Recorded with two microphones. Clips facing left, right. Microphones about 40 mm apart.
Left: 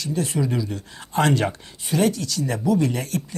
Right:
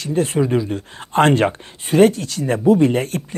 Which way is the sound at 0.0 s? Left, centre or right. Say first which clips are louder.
Right 6 dB; right.